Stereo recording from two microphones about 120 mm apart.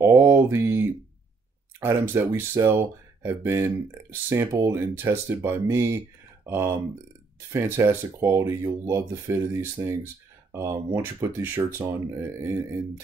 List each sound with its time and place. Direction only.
0.0 s speech: 20° right (ahead or behind)